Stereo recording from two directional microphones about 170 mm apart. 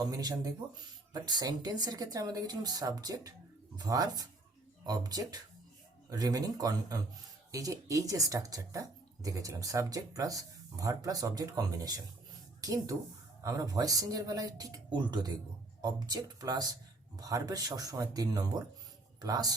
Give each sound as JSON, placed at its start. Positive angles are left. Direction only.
{"t": 0.0, "sound": "speech", "side_deg": -25}